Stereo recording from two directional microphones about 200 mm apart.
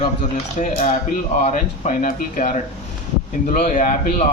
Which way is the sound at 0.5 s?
40° left (ahead or behind).